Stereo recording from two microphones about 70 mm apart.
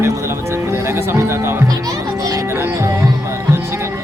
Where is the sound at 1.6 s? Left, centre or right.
Right.